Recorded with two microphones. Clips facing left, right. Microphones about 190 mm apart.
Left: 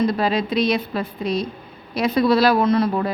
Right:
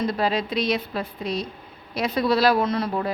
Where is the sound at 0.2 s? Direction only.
70° left (ahead or behind).